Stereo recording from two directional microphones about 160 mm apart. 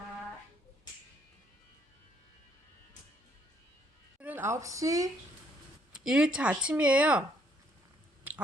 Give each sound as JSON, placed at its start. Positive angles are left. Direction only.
{"t": 4.2, "sound": "speech", "side_deg": -10}
{"t": 5.9, "sound": "speech", "side_deg": -5}